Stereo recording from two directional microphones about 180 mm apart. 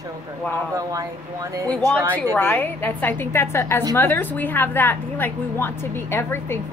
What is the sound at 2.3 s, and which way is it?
A woman's voice, 10° left (ahead or behind).